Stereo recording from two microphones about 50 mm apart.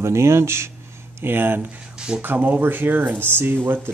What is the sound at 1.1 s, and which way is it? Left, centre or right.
Speech, right.